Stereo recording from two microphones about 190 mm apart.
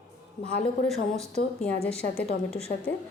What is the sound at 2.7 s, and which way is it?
Speech, 45° left (ahead or behind).